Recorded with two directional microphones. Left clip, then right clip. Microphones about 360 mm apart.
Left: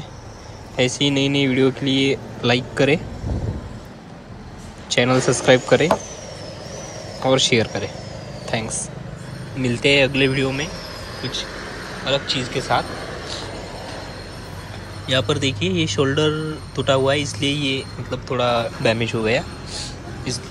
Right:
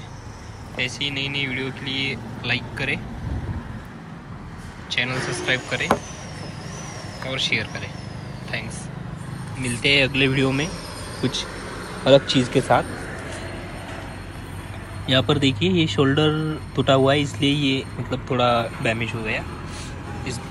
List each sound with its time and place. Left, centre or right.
0.7 s speech: centre
4.8 s speech: centre
7.2 s speech: centre
15.0 s speech: centre